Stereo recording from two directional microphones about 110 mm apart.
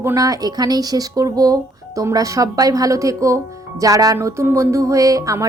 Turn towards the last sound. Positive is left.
turn(degrees=-30)  # may be behind; listen again after turning